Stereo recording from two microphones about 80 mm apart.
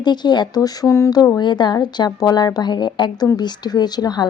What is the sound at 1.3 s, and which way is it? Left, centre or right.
A woman's voice, left.